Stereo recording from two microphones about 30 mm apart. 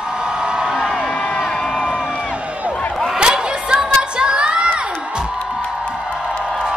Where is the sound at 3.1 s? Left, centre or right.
Right.